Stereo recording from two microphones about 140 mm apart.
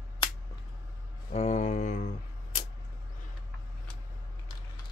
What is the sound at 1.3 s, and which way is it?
Mantra, 55° left (ahead or behind).